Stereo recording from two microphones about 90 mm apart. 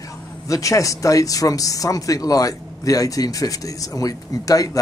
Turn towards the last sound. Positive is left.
turn(degrees=40)  # may be behind; listen again after turning